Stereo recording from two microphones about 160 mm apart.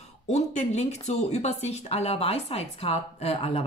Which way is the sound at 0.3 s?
45° left (ahead or behind).